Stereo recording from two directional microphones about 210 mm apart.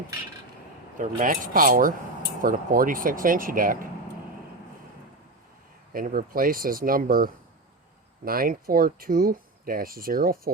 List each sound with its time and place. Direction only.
0.9 s speech: 40° right (ahead or behind)
5.9 s speech: 40° right (ahead or behind)